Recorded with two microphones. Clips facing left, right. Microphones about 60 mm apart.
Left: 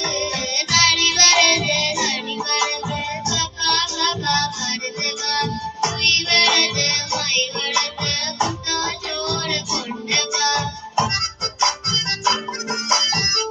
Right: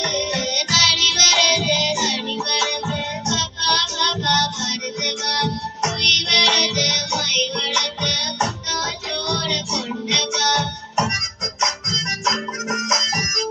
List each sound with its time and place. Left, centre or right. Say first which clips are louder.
0.0 s music: right 1 dB; left
10.9 s music: even; right